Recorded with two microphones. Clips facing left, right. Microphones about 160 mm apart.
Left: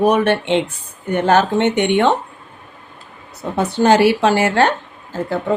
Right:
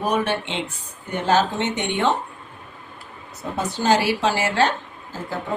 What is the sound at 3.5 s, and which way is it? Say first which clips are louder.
A woman's voice: left 6 dB; 60° left (ahead or behind).